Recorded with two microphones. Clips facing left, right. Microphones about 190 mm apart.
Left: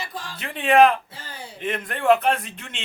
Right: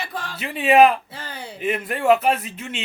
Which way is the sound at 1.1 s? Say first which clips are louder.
Right 4 dB; 65° right (ahead or behind).